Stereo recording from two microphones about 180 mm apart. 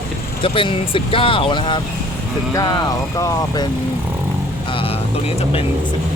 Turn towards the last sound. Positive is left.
turn(degrees=30)  # may be behind; listen again after turning